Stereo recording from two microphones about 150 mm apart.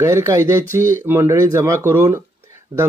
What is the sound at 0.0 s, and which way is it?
Speech, 20° right (ahead or behind).